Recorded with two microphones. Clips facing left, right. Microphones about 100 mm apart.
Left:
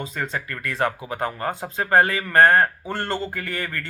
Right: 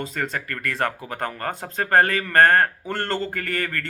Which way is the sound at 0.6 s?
55° right (ahead or behind).